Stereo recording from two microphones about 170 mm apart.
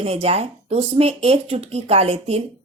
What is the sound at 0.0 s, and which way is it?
Speech, 35° right (ahead or behind).